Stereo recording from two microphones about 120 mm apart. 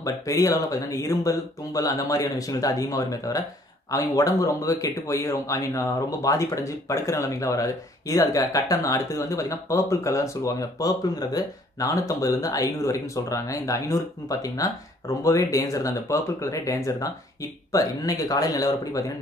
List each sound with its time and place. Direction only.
0.0 s a man's voice: 25° left (ahead or behind)